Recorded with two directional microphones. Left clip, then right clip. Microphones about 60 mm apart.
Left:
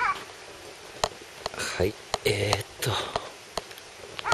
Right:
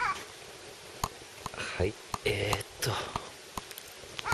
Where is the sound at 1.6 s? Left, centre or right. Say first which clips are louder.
Left 5 dB; centre.